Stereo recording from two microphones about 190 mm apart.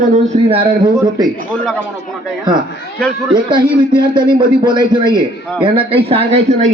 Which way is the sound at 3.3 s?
25° right (ahead or behind).